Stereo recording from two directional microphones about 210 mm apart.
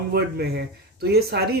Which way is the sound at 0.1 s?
50° right (ahead or behind).